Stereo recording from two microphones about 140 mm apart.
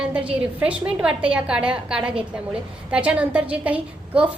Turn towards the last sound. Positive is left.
turn(degrees=-10)  # may be behind; listen again after turning